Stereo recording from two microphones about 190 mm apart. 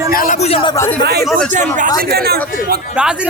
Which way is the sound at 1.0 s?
55° right (ahead or behind).